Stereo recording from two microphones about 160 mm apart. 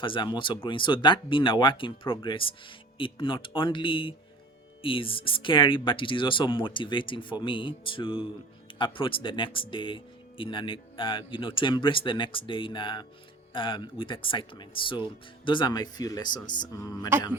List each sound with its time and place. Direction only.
0.0 s speech: 30° left (ahead or behind)